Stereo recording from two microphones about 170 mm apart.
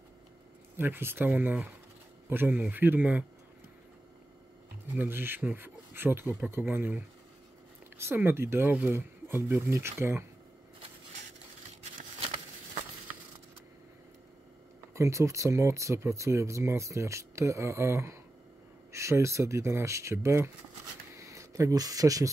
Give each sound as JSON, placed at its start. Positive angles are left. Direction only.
{"t": 0.7, "sound": "speech", "side_deg": -10}
{"t": 4.9, "sound": "speech", "side_deg": -10}
{"t": 8.0, "sound": "speech", "side_deg": -15}
{"t": 15.0, "sound": "speech", "side_deg": -15}
{"t": 21.1, "sound": "a sound", "side_deg": -20}